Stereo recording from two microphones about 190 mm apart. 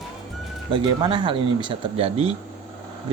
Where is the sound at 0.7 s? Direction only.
25° right (ahead or behind).